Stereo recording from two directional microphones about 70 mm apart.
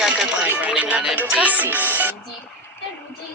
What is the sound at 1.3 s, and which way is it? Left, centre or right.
Speech, right.